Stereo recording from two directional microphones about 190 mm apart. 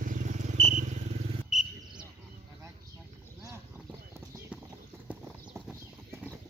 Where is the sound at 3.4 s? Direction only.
15° right (ahead or behind).